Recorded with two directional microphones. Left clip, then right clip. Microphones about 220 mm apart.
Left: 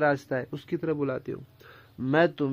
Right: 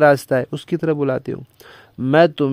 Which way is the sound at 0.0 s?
50° right (ahead or behind).